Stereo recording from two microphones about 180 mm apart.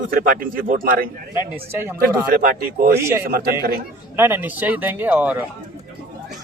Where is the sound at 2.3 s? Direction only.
55° right (ahead or behind).